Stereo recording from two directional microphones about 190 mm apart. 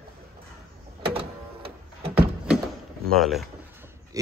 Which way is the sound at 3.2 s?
Centre (ahead or behind).